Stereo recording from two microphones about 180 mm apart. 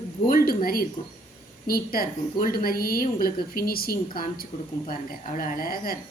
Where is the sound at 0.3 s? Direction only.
55° left (ahead or behind).